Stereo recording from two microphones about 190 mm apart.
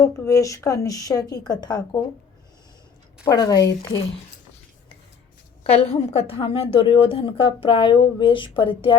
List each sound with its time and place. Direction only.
0.0 s a woman's voice: 15° left (ahead or behind)
3.2 s a woman's voice: 20° left (ahead or behind)
5.7 s a woman's voice: 30° left (ahead or behind)